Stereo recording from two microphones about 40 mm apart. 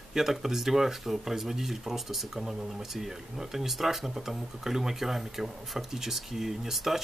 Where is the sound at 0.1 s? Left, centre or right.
Centre.